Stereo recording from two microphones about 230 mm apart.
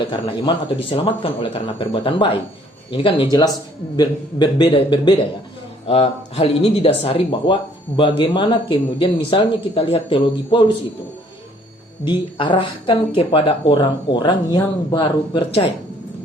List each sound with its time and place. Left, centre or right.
0.0 s speech: left
12.0 s speech: left